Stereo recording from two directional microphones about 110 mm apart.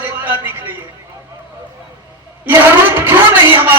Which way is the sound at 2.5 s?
20° right (ahead or behind).